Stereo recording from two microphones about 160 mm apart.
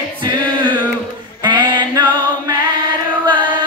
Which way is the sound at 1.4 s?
30° right (ahead or behind).